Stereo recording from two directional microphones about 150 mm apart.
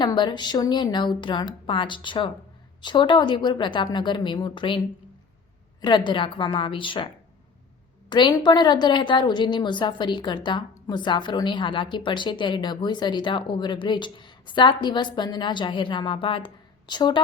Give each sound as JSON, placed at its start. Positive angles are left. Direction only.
{"t": 0.0, "sound": "a woman's voice", "side_deg": 30}
{"t": 6.1, "sound": "a woman's voice", "side_deg": 35}
{"t": 8.1, "sound": "a woman's voice", "side_deg": 30}